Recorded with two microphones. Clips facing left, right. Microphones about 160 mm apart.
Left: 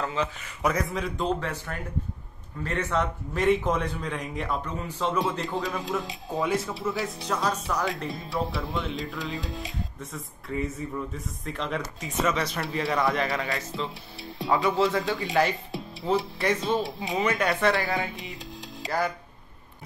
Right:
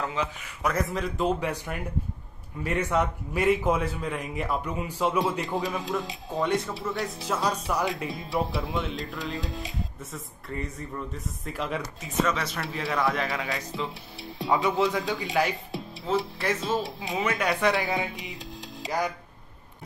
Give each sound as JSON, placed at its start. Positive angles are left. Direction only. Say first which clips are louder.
{"t": 0.6, "sound": "a man's voice", "louder": "left 1 dB", "side_deg": 0}
{"t": 18.9, "sound": "speech", "louder": "left 1 dB", "side_deg": -15}